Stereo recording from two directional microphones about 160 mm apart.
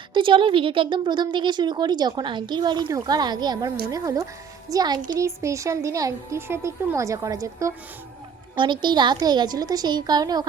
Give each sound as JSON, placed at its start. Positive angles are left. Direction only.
{"t": 0.1, "sound": "a woman's voice", "side_deg": -30}